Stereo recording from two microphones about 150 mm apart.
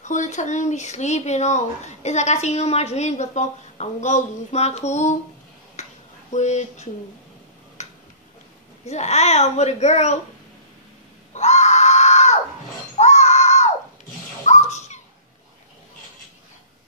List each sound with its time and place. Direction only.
0.0 s speech: 55° left (ahead or behind)
5.8 s a sound: 50° left (ahead or behind)
6.3 s speech: 50° left (ahead or behind)
7.8 s tick-tock: 50° left (ahead or behind)
8.8 s speech: 45° left (ahead or behind)
11.3 s screaming: 50° left (ahead or behind)
12.9 s music: 45° left (ahead or behind)
14.4 s a sound: 50° left (ahead or behind)